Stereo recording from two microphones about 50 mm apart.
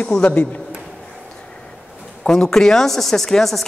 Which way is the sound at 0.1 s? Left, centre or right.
Centre.